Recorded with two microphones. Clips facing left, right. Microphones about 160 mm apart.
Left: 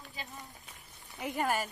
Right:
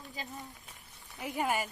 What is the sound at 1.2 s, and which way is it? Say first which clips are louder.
Speech: even; centre (ahead or behind).